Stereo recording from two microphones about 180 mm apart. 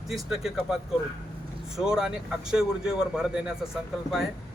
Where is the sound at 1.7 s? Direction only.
5° right (ahead or behind).